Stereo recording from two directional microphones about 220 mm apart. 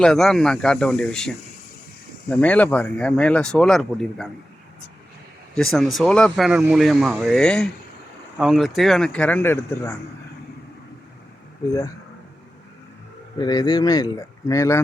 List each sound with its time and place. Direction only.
0.0 s speech: centre (ahead or behind)
2.3 s speech: 5° left (ahead or behind)
5.5 s speech: centre (ahead or behind)
13.4 s speech: 15° left (ahead or behind)